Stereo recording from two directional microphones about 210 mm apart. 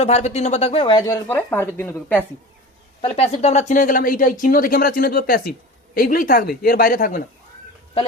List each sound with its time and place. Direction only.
0.0 s speech: 30° left (ahead or behind); by 2.2 s 10° left (ahead or behind)
3.0 s a woman's voice: 30° left (ahead or behind)